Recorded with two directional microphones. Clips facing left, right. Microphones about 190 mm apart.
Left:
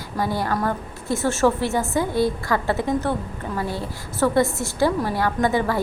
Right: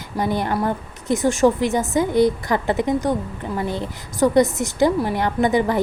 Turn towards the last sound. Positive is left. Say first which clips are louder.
# right 2 dB
turn(degrees=-20)  # may be behind; listen again after turning